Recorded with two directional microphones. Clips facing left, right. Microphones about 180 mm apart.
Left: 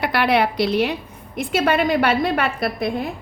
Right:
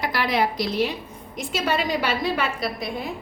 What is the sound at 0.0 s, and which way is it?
A woman's voice, 65° left (ahead or behind).